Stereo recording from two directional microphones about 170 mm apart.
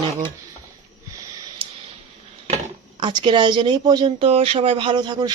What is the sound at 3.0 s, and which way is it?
Speech, 30° right (ahead or behind).